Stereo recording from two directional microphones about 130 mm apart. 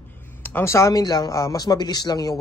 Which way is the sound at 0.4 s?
15° left (ahead or behind).